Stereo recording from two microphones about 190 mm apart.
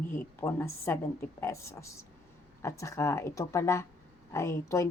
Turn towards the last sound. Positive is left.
turn(degrees=15)  # may be behind; listen again after turning